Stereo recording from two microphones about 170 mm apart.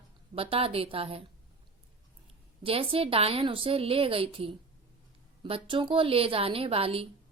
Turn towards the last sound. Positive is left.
turn(degrees=-35)  # may be behind; listen again after turning